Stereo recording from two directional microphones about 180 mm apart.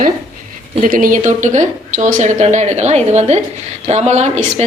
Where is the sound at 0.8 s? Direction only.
50° right (ahead or behind).